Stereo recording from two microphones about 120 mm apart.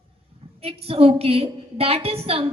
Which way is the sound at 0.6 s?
55° right (ahead or behind).